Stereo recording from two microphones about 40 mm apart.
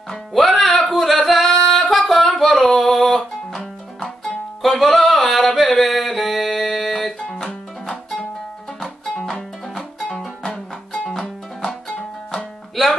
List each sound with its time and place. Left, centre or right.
0.3 s music: centre
0.9 s singing: centre
2.3 s music: centre
9.0 s music: centre
12.3 s music: centre